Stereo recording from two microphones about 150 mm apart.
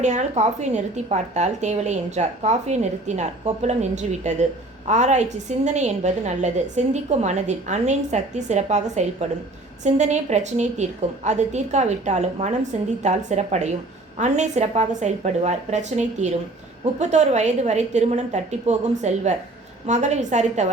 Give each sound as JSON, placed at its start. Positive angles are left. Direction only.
{"t": 0.0, "sound": "a woman's voice", "side_deg": -50}